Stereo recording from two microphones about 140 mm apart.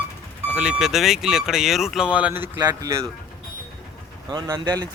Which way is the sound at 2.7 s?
25° right (ahead or behind).